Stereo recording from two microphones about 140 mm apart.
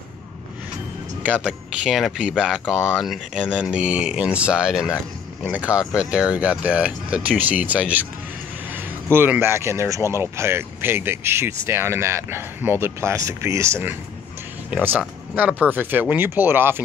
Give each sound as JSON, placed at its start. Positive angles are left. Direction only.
{"t": 1.2, "sound": "speech", "side_deg": -10}
{"t": 2.6, "sound": "speech", "side_deg": 5}